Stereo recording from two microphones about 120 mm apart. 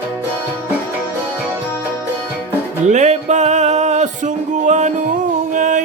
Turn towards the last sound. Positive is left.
turn(degrees=-90)